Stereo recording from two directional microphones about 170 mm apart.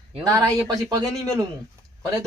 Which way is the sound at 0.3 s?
20° right (ahead or behind).